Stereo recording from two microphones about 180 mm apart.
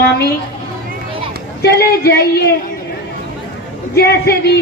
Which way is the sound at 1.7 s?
65° left (ahead or behind).